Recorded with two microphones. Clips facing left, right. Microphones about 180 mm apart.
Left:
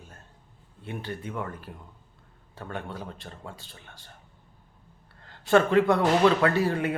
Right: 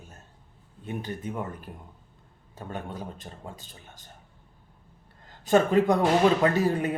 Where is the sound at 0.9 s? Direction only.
15° right (ahead or behind).